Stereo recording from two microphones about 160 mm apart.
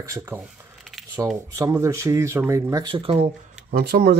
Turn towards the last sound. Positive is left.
turn(degrees=-80)